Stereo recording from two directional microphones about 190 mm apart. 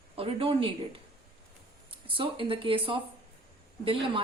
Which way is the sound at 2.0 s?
30° right (ahead or behind).